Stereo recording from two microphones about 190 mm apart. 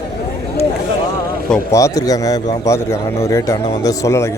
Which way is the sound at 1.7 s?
20° left (ahead or behind).